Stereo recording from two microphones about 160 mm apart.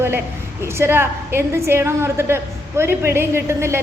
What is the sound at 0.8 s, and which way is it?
A woman's voice, 15° right (ahead or behind).